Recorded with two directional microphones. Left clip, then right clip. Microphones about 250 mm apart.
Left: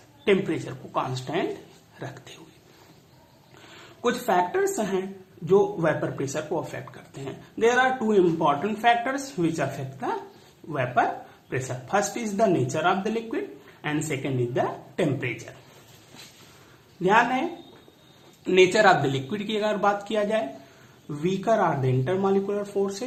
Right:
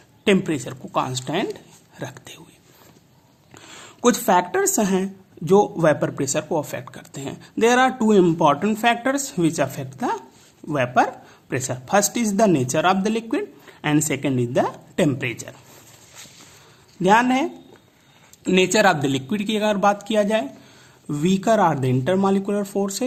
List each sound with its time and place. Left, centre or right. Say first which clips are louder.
0.3 s speech: right 3 dB; right
3.5 s speech: right 5 dB; right
17.0 s speech: right 4 dB; right
18.4 s speech: right 1 dB; right